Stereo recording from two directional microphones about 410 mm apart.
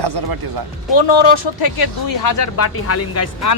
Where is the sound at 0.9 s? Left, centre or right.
Left.